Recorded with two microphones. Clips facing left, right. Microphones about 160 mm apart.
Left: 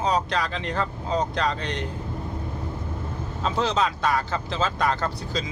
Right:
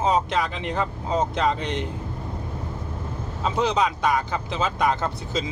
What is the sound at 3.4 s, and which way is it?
Speech, 15° right (ahead or behind).